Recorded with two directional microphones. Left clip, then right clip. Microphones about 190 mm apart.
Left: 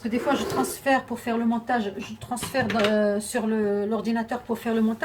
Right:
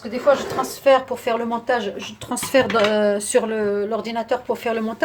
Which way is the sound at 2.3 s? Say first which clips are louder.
Right 8 dB; 50° right (ahead or behind).